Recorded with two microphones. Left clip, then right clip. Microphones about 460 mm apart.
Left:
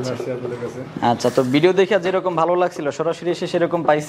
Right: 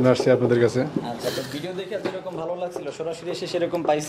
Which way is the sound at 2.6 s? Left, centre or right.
Left.